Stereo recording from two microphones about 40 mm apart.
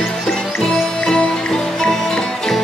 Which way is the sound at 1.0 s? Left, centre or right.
Centre.